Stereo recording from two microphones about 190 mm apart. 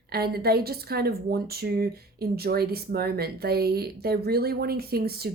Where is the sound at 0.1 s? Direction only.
55° right (ahead or behind).